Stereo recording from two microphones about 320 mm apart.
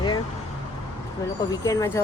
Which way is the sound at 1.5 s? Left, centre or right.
Centre.